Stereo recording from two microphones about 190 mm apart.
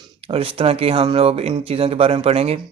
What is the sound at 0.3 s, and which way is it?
Speech, 30° right (ahead or behind).